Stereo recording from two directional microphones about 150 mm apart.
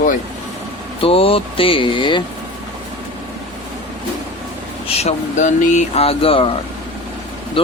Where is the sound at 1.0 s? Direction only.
40° left (ahead or behind).